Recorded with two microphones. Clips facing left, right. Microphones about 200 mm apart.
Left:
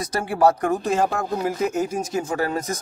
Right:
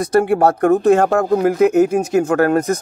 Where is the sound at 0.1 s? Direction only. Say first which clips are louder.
Right 5 dB; 60° right (ahead or behind).